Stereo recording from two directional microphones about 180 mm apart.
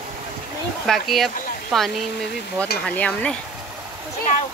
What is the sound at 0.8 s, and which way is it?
Speech, centre (ahead or behind).